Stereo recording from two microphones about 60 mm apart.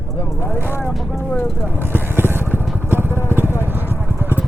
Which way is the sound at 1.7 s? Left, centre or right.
Right.